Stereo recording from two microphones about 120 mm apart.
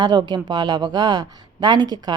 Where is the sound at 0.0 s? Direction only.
35° right (ahead or behind).